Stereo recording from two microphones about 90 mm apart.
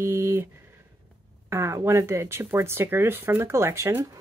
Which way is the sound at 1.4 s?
30° right (ahead or behind).